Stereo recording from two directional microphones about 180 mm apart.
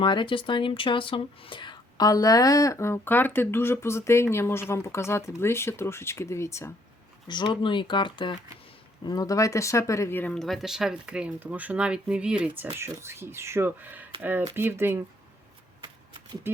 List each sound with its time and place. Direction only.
0.0 s speech: 25° left (ahead or behind)
7.3 s speech: 25° left (ahead or behind); by 14.9 s 10° right (ahead or behind)